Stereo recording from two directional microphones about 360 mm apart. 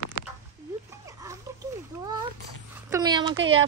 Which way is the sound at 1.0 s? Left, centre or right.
Centre.